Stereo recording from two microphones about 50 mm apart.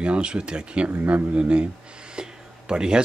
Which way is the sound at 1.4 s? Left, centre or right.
Centre.